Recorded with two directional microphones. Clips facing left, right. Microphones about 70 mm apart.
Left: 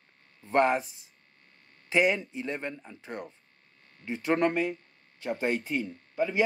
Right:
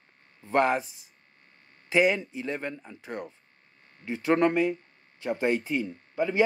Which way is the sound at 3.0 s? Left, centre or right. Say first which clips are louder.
Right 2 dB; centre.